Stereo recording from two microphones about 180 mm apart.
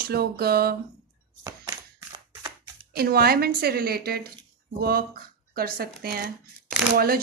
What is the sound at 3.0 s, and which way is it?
Speech, 60° right (ahead or behind).